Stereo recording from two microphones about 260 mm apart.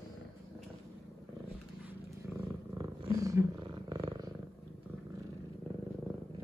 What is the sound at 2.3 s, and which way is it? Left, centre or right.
Purr, centre.